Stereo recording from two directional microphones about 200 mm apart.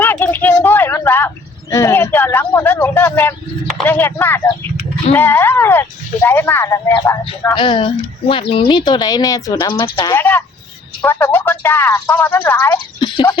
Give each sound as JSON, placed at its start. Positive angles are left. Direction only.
{"t": 0.0, "sound": "a sound", "side_deg": 10}
{"t": 1.7, "sound": "speech", "side_deg": 15}
{"t": 10.2, "sound": "speech", "side_deg": 10}